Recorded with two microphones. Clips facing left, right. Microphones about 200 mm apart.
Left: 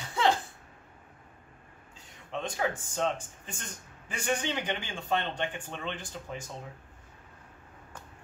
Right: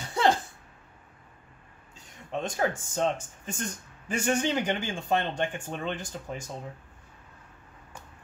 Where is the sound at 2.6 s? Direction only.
40° right (ahead or behind).